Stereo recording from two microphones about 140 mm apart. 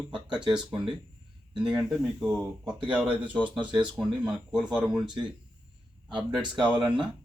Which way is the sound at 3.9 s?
5° right (ahead or behind).